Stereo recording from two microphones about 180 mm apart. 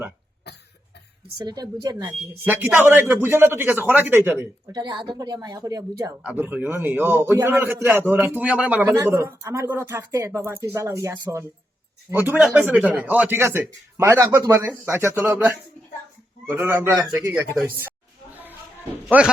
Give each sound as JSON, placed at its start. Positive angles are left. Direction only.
{"t": 1.4, "sound": "speech", "side_deg": -20}
{"t": 2.4, "sound": "a man's voice", "side_deg": -10}
{"t": 4.7, "sound": "a man's voice", "side_deg": -25}
{"t": 19.0, "sound": "speech", "side_deg": -5}